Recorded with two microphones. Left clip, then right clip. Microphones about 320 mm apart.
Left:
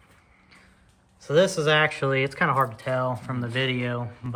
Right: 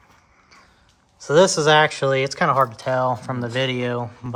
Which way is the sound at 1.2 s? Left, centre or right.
Right.